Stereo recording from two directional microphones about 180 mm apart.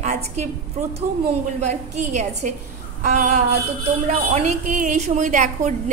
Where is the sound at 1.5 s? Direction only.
40° right (ahead or behind).